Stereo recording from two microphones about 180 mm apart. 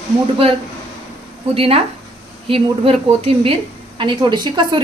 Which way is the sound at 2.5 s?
30° right (ahead or behind).